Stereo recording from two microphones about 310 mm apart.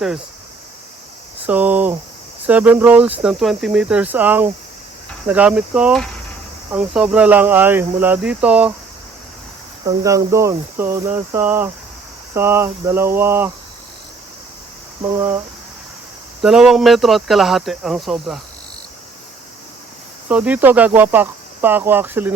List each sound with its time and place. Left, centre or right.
1.5 s speech: centre
9.8 s speech: centre
15.0 s speech: centre
16.4 s speech: centre
20.2 s speech: centre